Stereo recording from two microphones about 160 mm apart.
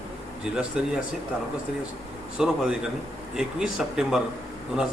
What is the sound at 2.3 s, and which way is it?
Speech, 5° right (ahead or behind).